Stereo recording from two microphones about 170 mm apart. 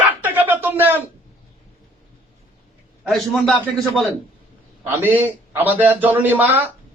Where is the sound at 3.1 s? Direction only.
Centre (ahead or behind).